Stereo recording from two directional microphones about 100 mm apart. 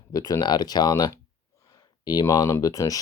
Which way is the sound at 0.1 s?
40° left (ahead or behind).